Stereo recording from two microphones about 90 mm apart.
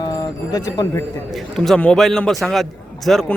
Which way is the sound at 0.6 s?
35° left (ahead or behind).